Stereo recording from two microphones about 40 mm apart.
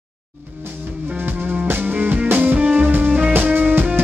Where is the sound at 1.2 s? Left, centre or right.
Right.